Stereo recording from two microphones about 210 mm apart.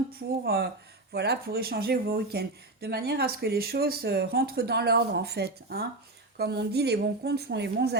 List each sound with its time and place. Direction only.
0.2 s speech: 50° right (ahead or behind)